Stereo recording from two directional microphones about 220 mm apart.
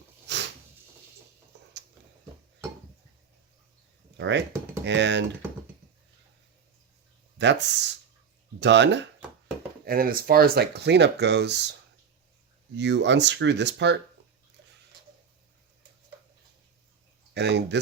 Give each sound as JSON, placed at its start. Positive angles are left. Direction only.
{"t": 0.3, "sound": "a sound", "side_deg": -50}
{"t": 4.2, "sound": "speech", "side_deg": -55}
{"t": 7.3, "sound": "speech", "side_deg": -55}
{"t": 9.8, "sound": "speech", "side_deg": -40}
{"t": 12.7, "sound": "speech", "side_deg": -50}
{"t": 17.3, "sound": "a sound", "side_deg": -50}